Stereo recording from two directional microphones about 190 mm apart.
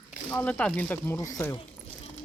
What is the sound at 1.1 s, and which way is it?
Speech, 20° left (ahead or behind).